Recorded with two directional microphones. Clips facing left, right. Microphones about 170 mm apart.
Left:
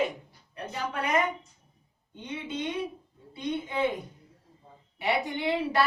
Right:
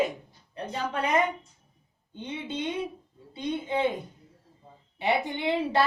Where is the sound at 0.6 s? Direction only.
25° right (ahead or behind).